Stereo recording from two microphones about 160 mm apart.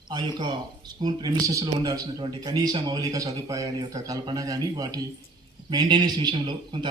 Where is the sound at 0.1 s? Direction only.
25° right (ahead or behind).